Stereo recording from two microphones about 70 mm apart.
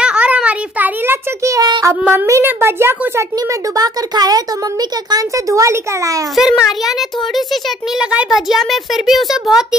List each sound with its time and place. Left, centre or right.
0.0 s a sound: centre
1.6 s child singing: right
2.1 s a child's voice: right
2.4 s a woman's voice: right
3.7 s speech: right
5.5 s a child's voice: right
6.3 s a child's voice: centre
8.0 s a child's voice: centre